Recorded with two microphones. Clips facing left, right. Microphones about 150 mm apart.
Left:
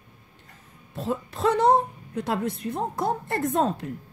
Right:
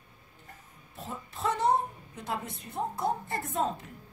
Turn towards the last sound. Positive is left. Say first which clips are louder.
# left 7 dB
turn(degrees=80)